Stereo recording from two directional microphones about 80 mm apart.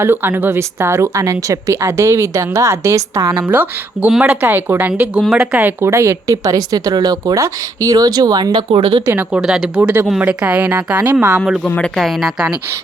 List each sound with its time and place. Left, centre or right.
0.0 s a woman's voice: right
3.4 s speech: right
4.9 s speech: centre
5.9 s speech: right
7.3 s speech: right
9.0 s speech: right
9.4 s speech: centre
11.3 s a woman's voice: centre